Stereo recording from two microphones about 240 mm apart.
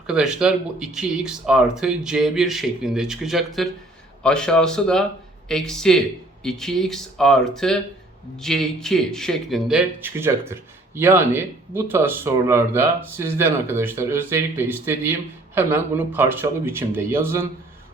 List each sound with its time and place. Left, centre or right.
0.1 s speech: centre